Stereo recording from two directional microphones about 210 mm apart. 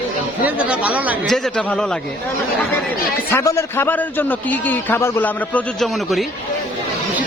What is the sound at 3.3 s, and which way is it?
A man's voice, 10° left (ahead or behind).